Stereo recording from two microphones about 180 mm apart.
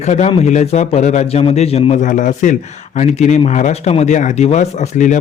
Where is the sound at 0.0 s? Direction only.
40° left (ahead or behind).